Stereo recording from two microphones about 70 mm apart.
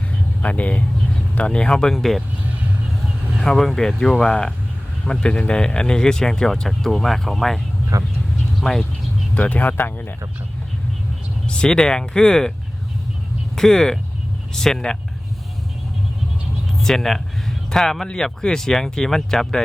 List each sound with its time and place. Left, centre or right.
0.4 s speech: left; by 2.2 s centre
3.4 s speech: centre
7.9 s speech: right
8.7 s speech: centre
9.3 s speech: left
11.4 s speech: centre
13.6 s speech: centre
16.8 s speech: centre